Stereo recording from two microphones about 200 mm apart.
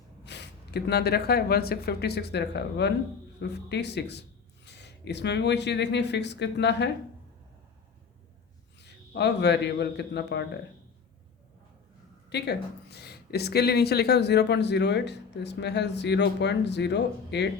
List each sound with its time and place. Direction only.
0.3 s speech: 55° left (ahead or behind)
8.8 s a man's voice: 60° left (ahead or behind)
12.3 s speech: 55° left (ahead or behind)